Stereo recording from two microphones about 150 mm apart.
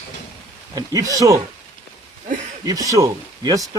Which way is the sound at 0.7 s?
25° right (ahead or behind).